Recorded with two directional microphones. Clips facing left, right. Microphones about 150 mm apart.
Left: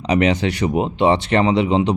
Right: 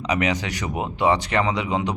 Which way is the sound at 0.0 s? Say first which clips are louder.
Left 6 dB; 30° left (ahead or behind).